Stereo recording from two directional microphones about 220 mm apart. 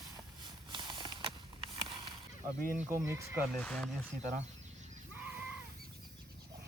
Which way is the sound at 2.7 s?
10° right (ahead or behind).